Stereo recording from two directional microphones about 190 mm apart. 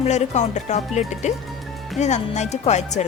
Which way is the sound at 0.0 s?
35° left (ahead or behind).